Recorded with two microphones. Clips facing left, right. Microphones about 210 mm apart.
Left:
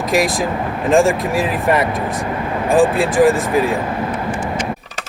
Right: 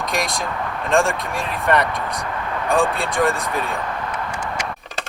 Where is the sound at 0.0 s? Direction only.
Centre (ahead or behind).